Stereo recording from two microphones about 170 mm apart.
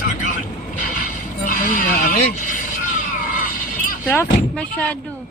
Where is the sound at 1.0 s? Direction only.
50° left (ahead or behind).